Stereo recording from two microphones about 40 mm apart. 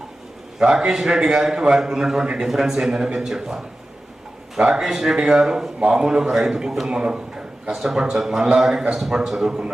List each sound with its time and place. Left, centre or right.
0.6 s a man's voice: right
2.5 s a man's voice: centre